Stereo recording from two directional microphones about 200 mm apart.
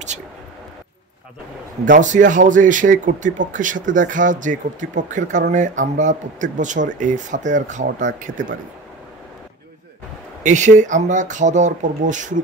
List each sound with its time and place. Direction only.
1.9 s speech: 40° right (ahead or behind)
10.4 s speech: 35° right (ahead or behind)